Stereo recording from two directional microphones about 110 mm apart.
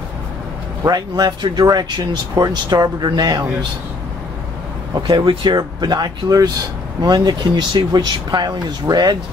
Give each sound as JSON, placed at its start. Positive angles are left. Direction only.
{"t": 0.8, "sound": "speech", "side_deg": -35}
{"t": 4.9, "sound": "speech", "side_deg": -45}